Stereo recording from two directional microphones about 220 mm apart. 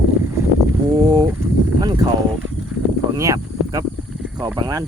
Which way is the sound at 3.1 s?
15° right (ahead or behind).